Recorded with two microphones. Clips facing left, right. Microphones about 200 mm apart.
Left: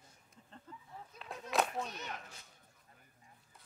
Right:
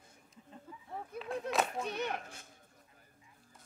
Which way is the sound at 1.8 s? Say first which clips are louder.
Right 9 dB; 60° right (ahead or behind).